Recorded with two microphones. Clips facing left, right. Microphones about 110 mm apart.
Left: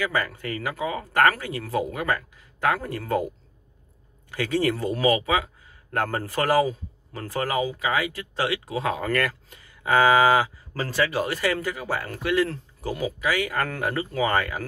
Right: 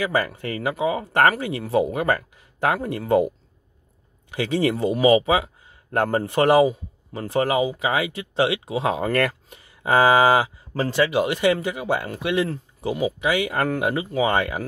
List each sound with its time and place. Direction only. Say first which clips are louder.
0.0 s speech: right 3 dB; 25° right (ahead or behind)
4.3 s speech: right 2 dB; 20° right (ahead or behind)